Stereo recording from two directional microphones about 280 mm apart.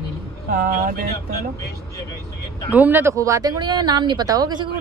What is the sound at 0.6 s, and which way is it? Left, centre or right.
Speech, right.